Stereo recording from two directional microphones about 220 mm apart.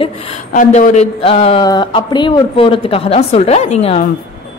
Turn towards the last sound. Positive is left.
turn(degrees=30)  # may be behind; listen again after turning